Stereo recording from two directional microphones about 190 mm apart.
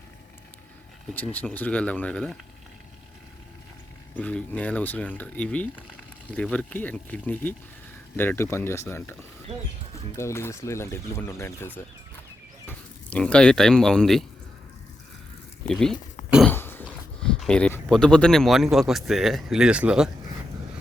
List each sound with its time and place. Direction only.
1.1 s speech: 10° left (ahead or behind)
4.1 s speech: 5° left (ahead or behind)
10.2 s speech: 15° left (ahead or behind)
15.6 s speech: 5° left (ahead or behind)
16.5 s cough: 10° left (ahead or behind)
17.2 s speech: 5° left (ahead or behind)